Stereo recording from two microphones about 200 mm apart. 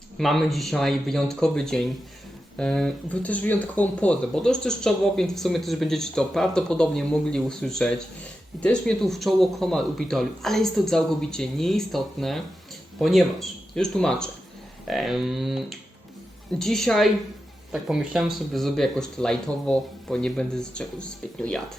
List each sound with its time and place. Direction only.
0.2 s speech: centre (ahead or behind)